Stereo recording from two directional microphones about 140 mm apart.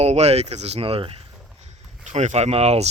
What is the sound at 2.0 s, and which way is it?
Speech, 55° right (ahead or behind).